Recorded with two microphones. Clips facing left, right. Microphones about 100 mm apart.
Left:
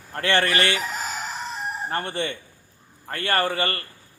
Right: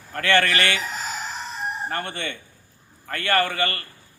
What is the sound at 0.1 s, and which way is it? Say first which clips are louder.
Speech: right 1 dB; 30° left (ahead or behind).